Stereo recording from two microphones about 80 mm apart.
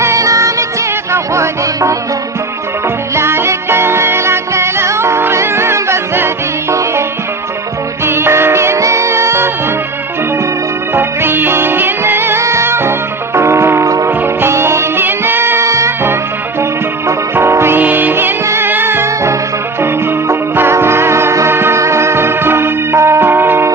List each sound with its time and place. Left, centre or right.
0.0 s music: right
3.2 s music: right
8.0 s music: right
10.9 s music: right
17.3 s music: right